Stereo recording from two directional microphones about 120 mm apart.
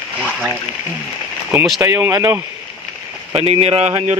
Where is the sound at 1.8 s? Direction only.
25° right (ahead or behind).